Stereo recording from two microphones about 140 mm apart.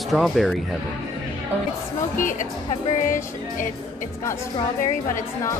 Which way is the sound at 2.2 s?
75° left (ahead or behind).